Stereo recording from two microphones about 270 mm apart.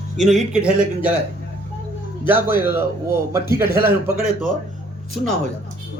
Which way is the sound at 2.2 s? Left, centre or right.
Centre.